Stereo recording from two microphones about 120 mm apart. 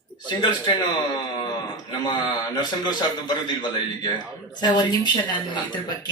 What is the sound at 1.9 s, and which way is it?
A man's voice, 40° left (ahead or behind).